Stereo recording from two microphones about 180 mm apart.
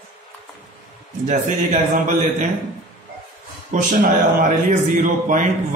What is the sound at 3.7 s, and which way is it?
A man's voice, 50° right (ahead or behind).